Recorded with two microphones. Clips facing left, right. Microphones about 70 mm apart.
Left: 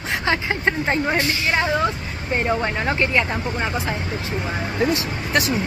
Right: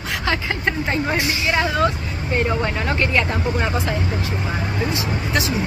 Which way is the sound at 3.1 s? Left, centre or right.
Centre.